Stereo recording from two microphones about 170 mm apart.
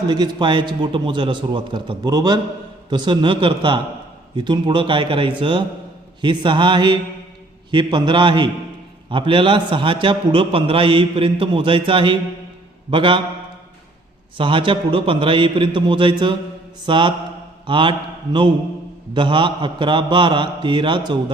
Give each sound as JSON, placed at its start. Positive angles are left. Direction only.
{"t": 0.1, "sound": "a man's voice", "side_deg": -25}
{"t": 14.3, "sound": "a man's voice", "side_deg": -30}
{"t": 19.1, "sound": "a man's voice", "side_deg": -30}